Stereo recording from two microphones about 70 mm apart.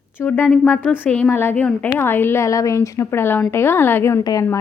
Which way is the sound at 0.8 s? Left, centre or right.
Left.